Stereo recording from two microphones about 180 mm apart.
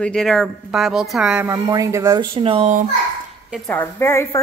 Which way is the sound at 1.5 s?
20° right (ahead or behind).